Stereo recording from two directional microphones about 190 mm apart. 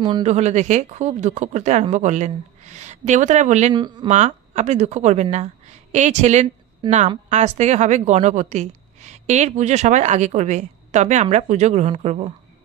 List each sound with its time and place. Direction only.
0.2 s a woman's voice: 35° right (ahead or behind)
3.7 s speech: 25° right (ahead or behind)
4.1 s a woman's voice: 40° right (ahead or behind)
6.8 s speech: 25° right (ahead or behind)
7.2 s a woman's voice: 35° right (ahead or behind)